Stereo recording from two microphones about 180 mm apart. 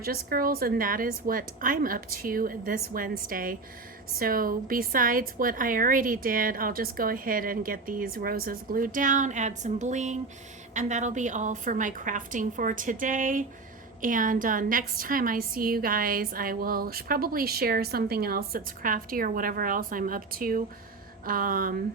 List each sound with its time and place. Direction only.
0.0 s a woman's voice: 55° right (ahead or behind)